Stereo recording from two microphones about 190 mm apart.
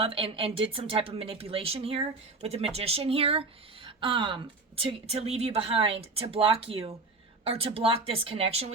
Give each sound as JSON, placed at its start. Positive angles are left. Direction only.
{"t": 0.0, "sound": "speech", "side_deg": -30}